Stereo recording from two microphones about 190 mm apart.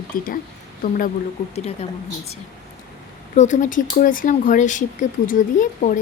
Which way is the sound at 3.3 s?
40° left (ahead or behind).